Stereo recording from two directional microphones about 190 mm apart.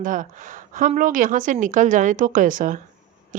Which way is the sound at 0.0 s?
45° right (ahead or behind).